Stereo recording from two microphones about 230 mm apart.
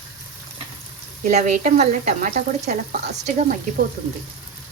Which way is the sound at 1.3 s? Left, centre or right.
Right.